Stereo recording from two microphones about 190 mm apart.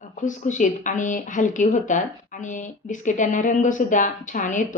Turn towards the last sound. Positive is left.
turn(degrees=40)  # may be behind; listen again after turning